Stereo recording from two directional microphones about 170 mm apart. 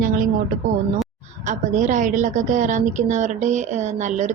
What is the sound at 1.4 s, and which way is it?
A woman's voice, 45° right (ahead or behind).